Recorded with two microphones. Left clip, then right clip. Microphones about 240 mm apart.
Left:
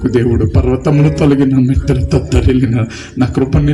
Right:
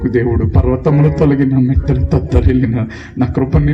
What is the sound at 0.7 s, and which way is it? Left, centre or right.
A man's voice, left.